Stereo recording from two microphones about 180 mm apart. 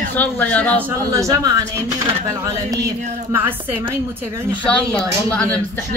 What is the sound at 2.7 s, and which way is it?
Speech, 15° right (ahead or behind).